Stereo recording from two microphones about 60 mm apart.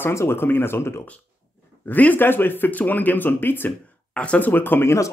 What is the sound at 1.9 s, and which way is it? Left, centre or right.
Speech, left.